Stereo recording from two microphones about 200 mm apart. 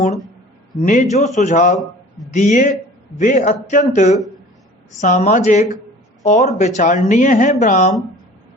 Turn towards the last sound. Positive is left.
turn(degrees=40)  # may be behind; listen again after turning